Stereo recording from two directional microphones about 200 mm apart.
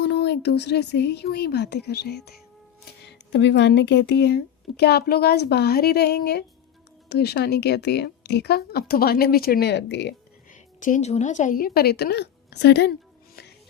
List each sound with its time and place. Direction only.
0.0 s speech: 60° left (ahead or behind)
10.8 s speech: 40° left (ahead or behind)